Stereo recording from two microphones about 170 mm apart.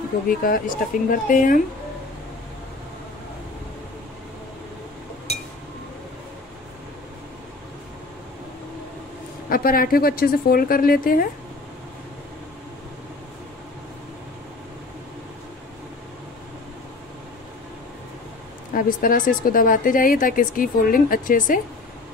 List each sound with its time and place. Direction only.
0.3 s speech: 55° left (ahead or behind)
9.5 s a woman's voice: 60° left (ahead or behind)
18.7 s a woman's voice: 55° left (ahead or behind)